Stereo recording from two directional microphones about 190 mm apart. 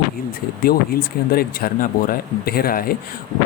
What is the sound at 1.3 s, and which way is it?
Speech, 50° left (ahead or behind).